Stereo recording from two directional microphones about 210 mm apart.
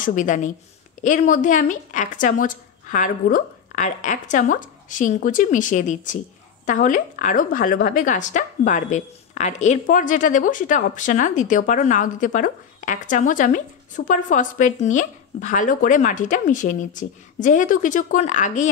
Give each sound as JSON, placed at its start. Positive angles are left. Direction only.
{"t": 0.0, "sound": "speech", "side_deg": 40}